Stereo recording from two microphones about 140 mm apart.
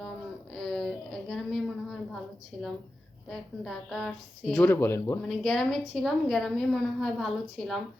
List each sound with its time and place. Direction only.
0.5 s a sound: centre (ahead or behind)
2.5 s a woman's voice: centre (ahead or behind)
4.5 s speech: 15° left (ahead or behind)
5.2 s a woman's voice: 5° left (ahead or behind)